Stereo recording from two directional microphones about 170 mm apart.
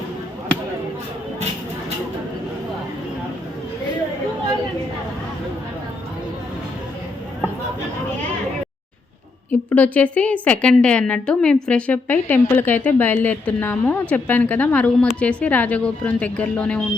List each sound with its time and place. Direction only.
9.5 s a woman's voice: 10° left (ahead or behind)